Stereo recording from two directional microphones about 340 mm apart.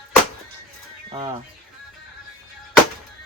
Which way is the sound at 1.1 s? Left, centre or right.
Centre.